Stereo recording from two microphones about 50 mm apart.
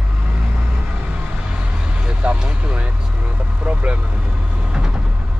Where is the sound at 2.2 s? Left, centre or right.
Right.